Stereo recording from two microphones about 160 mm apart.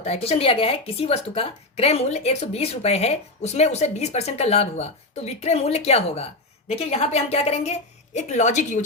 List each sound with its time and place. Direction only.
0.0 s a woman's voice: 40° left (ahead or behind)